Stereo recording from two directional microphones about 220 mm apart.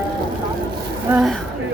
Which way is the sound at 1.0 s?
5° right (ahead or behind).